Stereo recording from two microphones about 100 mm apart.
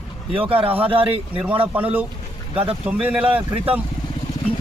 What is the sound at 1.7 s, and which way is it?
Speech, 15° right (ahead or behind).